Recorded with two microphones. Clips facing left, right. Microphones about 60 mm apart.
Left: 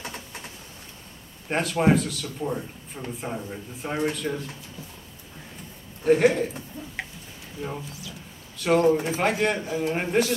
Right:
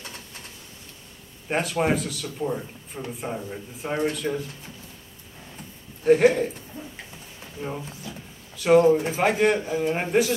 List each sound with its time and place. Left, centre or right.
1.5 s a man's voice: centre
6.0 s a man's voice: centre
7.6 s speech: centre
8.5 s a man's voice: centre